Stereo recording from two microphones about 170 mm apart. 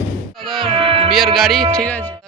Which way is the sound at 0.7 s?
35° right (ahead or behind).